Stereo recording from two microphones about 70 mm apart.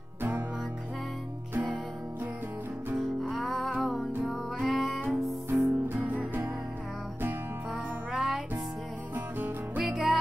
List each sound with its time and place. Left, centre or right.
1.5 s music: right
3.0 s music: centre
5.5 s music: right
8.1 s music: centre
9.1 s music: right
9.8 s music: centre